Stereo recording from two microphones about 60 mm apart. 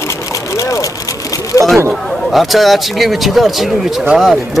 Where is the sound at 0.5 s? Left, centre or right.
Left.